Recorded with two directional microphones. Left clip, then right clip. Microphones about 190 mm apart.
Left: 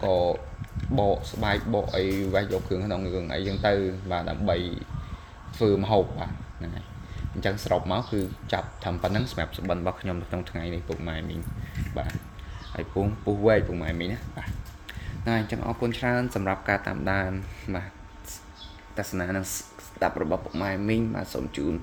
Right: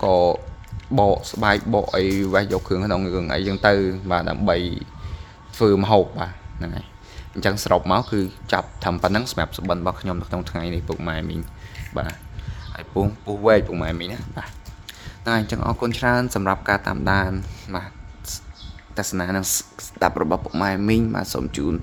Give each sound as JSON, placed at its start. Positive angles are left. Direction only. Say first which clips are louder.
{"t": 0.0, "sound": "speech", "louder": "right 7 dB", "side_deg": -45}
{"t": 18.9, "sound": "speech", "louder": "right 5 dB", "side_deg": -25}